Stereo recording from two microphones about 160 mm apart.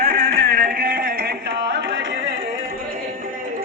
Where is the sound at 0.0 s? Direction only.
65° right (ahead or behind).